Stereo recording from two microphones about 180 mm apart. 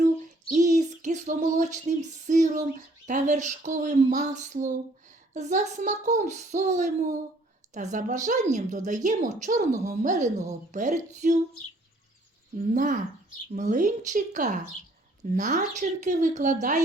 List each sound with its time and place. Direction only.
0.5 s female singing: 40° right (ahead or behind)
3.1 s a woman's voice: 40° right (ahead or behind)
12.7 s a woman's voice: 45° right (ahead or behind)